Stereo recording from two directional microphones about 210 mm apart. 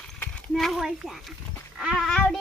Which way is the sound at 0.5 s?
Centre (ahead or behind).